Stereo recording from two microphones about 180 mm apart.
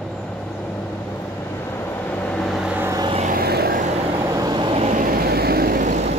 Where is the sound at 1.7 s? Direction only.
10° left (ahead or behind); by 3.0 s 10° right (ahead or behind).